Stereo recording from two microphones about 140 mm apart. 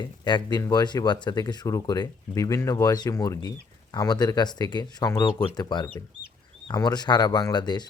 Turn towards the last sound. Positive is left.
turn(degrees=30)  # may be behind; listen again after turning